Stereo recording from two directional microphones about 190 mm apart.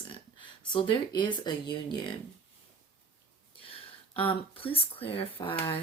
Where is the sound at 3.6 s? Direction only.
30° left (ahead or behind).